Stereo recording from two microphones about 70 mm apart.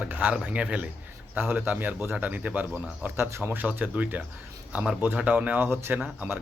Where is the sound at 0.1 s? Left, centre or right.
Right.